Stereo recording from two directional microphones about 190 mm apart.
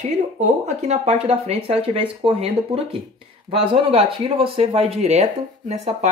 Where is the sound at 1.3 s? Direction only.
35° right (ahead or behind).